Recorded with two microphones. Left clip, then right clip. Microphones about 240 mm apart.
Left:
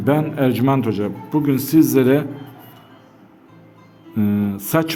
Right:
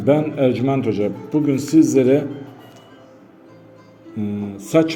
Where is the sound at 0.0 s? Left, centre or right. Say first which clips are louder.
Right 2 dB; left.